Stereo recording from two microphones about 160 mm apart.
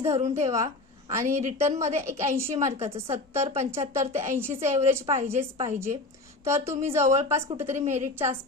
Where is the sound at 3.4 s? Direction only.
45° right (ahead or behind).